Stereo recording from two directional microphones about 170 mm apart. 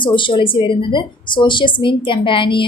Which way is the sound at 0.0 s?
30° left (ahead or behind).